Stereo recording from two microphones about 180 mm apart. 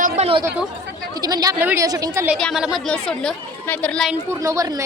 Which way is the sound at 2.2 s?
Centre (ahead or behind).